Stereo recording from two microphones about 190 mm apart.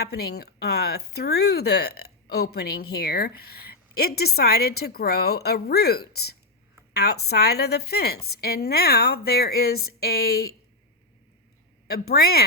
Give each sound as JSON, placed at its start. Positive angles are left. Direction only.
{"t": 0.0, "sound": "a woman's voice", "side_deg": 55}
{"t": 11.9, "sound": "a woman's voice", "side_deg": 55}